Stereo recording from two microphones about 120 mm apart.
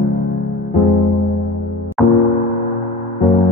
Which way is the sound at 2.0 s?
5° left (ahead or behind).